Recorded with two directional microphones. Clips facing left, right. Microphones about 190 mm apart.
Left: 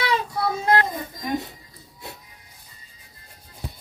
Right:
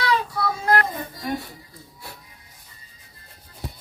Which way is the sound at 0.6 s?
25° left (ahead or behind).